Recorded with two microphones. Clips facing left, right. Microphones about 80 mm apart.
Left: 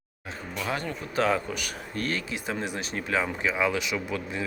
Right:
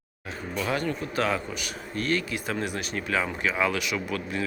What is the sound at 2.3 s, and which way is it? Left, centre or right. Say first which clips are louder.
Speech: right 1 dB; left.